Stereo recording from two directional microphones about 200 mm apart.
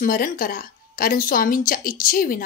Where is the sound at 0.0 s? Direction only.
45° left (ahead or behind).